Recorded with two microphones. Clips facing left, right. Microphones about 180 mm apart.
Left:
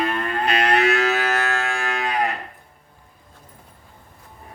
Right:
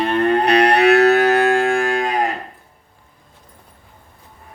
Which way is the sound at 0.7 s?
65° right (ahead or behind).